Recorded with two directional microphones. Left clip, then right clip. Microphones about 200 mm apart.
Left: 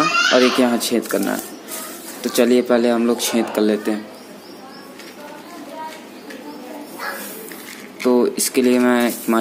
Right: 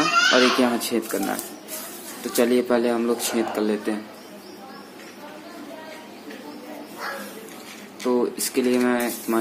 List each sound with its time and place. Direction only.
0.3 s speech: 20° left (ahead or behind)
8.0 s speech: 25° left (ahead or behind)